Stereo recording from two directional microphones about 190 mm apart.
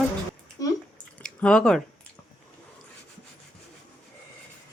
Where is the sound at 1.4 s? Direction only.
5° left (ahead or behind).